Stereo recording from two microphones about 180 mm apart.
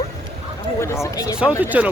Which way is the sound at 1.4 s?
10° right (ahead or behind).